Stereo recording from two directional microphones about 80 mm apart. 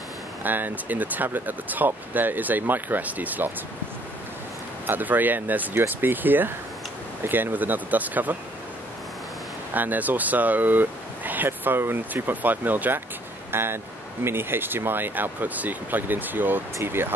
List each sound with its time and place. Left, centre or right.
0.4 s speech: right
4.8 s speech: right
9.8 s speech: right